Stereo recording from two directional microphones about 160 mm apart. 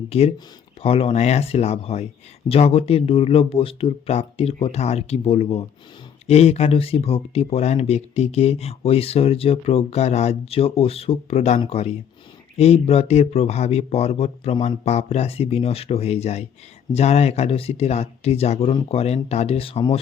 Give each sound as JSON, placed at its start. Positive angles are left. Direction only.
{"t": 0.1, "sound": "speech", "side_deg": 40}